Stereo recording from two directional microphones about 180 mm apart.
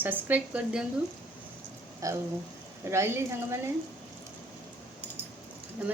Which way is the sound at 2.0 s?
15° right (ahead or behind).